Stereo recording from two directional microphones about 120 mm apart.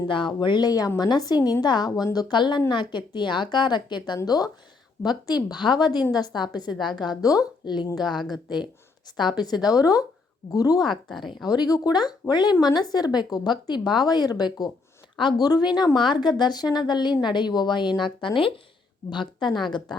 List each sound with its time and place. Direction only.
0.1 s a woman's voice: 40° left (ahead or behind)
11.1 s a woman's voice: centre (ahead or behind)
11.7 s a woman's voice: 35° left (ahead or behind)